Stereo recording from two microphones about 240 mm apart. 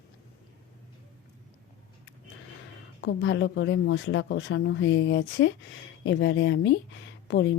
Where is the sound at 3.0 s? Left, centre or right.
Left.